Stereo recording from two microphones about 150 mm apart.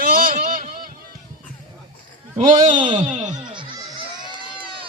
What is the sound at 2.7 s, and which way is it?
Speech, 35° right (ahead or behind).